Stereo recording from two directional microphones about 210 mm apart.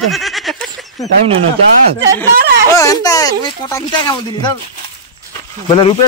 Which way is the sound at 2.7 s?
15° left (ahead or behind).